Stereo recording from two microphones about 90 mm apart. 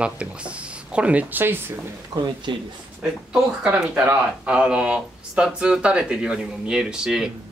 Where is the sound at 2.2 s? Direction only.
60° right (ahead or behind).